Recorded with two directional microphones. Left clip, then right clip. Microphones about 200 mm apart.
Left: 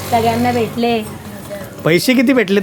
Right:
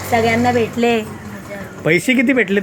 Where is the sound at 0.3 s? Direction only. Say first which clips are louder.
Even; centre (ahead or behind).